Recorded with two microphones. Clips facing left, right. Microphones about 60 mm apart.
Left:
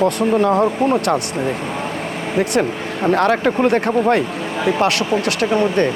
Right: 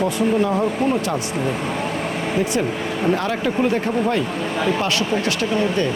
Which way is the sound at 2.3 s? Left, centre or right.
Left.